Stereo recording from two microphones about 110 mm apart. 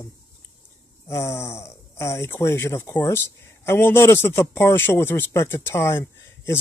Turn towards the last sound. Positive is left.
turn(degrees=20)  # may be behind; listen again after turning